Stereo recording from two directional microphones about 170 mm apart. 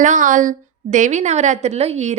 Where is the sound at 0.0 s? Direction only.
50° right (ahead or behind).